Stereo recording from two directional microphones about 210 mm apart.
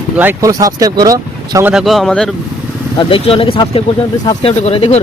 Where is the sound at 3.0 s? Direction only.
25° left (ahead or behind).